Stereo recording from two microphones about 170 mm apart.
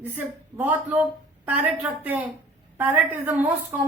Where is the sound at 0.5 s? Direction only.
10° right (ahead or behind).